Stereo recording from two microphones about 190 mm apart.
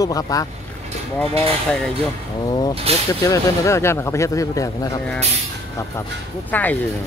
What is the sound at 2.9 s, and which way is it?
Speech, 30° right (ahead or behind).